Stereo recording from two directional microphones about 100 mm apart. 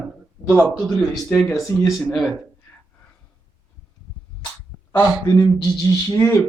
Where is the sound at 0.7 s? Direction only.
5° left (ahead or behind).